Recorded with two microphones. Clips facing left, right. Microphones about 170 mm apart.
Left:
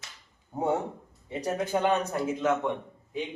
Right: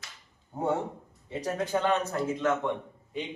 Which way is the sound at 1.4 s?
15° left (ahead or behind).